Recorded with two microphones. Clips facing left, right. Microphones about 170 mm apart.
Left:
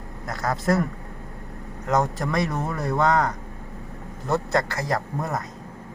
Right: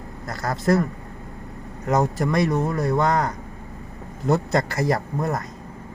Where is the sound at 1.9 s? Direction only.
5° right (ahead or behind).